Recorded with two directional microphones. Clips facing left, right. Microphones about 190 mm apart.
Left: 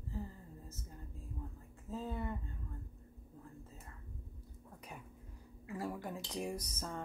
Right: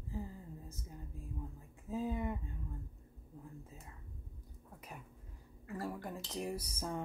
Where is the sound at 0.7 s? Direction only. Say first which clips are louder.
Right 1 dB; 15° right (ahead or behind).